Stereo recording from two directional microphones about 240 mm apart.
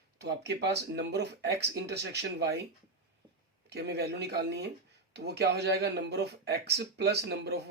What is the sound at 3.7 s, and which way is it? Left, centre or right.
Speech, right.